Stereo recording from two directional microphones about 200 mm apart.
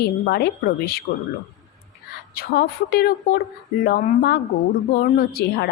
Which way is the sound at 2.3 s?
50° left (ahead or behind).